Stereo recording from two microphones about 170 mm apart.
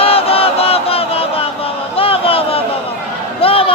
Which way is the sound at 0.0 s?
35° left (ahead or behind).